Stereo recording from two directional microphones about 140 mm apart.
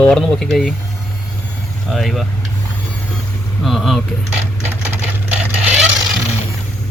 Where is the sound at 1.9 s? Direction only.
Centre (ahead or behind).